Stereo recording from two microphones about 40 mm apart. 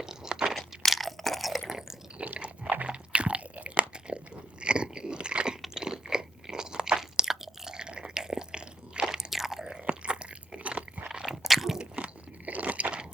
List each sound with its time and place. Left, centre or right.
0.0 s crunch: centre
0.9 s crunch: centre
2.1 s biting: right
2.8 s chewing: right
3.9 s crunch: right
4.6 s biting: right
5.7 s crunch: centre
7.2 s a sound: centre
9.3 s chewing: centre
9.9 s crunch: right
11.1 s squish: centre
11.4 s crunch: centre
11.8 s crunch: right